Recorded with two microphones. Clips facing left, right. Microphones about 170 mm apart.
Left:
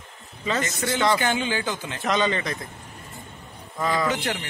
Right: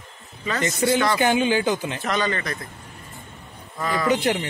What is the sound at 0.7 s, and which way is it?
Speech, 20° right (ahead or behind).